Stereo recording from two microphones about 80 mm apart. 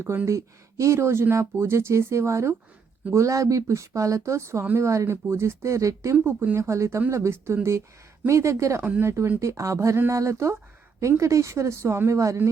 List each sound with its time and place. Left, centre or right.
0.3 s speech: right
6.2 s speech: right